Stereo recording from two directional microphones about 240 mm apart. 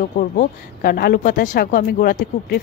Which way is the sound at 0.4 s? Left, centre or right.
Left.